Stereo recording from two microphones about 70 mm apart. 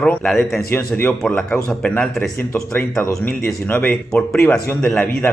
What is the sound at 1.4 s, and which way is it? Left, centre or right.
Speech, centre.